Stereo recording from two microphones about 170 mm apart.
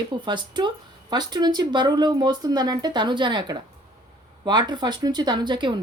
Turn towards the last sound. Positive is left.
turn(degrees=-25)  # may be behind; listen again after turning